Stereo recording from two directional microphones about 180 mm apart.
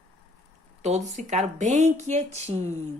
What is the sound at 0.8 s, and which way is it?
A woman's voice, 40° right (ahead or behind).